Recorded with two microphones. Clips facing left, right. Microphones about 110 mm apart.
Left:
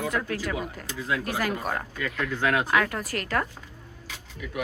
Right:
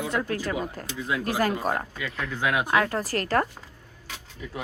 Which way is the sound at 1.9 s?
10° right (ahead or behind).